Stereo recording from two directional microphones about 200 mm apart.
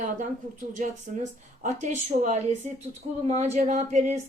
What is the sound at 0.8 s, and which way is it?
Speech, 40° right (ahead or behind).